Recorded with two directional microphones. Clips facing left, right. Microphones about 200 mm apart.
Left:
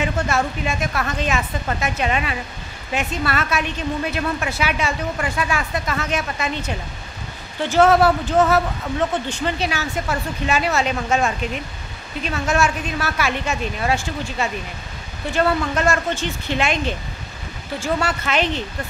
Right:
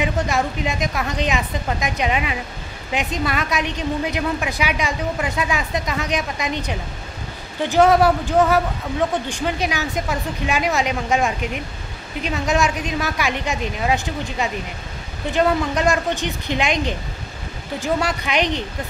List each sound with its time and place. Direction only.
0.0 s a woman's voice: 15° right (ahead or behind)